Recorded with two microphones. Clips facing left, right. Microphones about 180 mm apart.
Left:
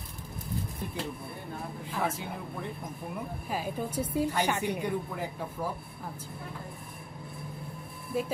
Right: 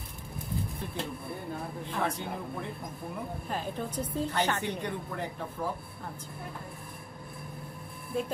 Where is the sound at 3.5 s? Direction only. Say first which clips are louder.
Left 2 dB; 10° left (ahead or behind).